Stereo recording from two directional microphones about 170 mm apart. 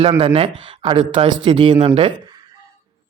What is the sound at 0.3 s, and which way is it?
Speech, 30° right (ahead or behind).